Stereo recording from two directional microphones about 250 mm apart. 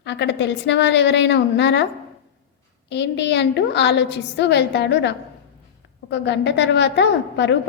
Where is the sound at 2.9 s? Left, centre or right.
Left.